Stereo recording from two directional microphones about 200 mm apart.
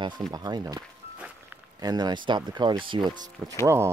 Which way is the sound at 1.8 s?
20° right (ahead or behind).